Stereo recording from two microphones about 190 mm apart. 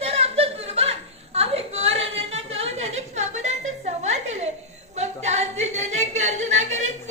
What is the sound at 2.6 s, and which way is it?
Music, 35° right (ahead or behind).